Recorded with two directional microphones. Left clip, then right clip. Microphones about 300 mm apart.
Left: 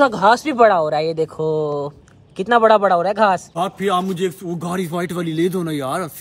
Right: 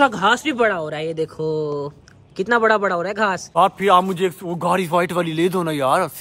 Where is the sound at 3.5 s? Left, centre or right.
Centre.